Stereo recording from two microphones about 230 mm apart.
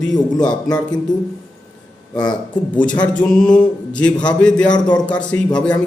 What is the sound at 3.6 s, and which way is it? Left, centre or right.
Speech, centre.